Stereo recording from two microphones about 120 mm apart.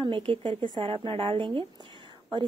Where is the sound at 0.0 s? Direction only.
45° right (ahead or behind).